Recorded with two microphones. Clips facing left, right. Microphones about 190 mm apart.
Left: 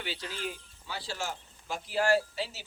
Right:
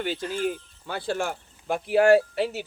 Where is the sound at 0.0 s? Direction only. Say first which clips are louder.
Right 10 dB; 50° right (ahead or behind).